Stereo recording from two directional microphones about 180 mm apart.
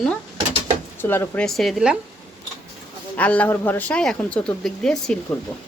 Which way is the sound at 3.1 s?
10° left (ahead or behind).